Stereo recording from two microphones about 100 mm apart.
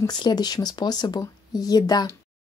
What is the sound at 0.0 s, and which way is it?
Speech, 45° left (ahead or behind).